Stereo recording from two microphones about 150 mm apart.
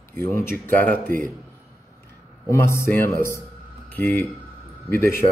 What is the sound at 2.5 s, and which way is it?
Speech, 20° left (ahead or behind).